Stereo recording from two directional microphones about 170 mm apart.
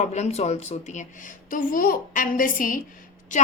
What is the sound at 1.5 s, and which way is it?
A woman's voice, 55° left (ahead or behind).